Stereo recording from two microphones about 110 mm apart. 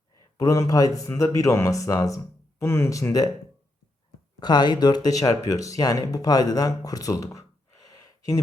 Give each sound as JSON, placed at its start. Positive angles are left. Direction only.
{"t": 0.3, "sound": "speech", "side_deg": 30}
{"t": 4.4, "sound": "speech", "side_deg": 40}